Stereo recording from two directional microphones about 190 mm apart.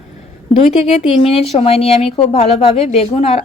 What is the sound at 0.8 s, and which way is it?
A woman's voice, 30° left (ahead or behind).